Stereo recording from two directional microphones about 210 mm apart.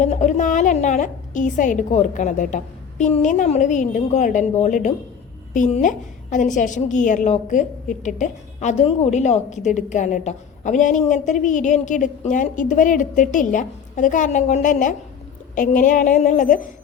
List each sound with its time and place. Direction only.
0.0 s a woman's voice: 35° left (ahead or behind)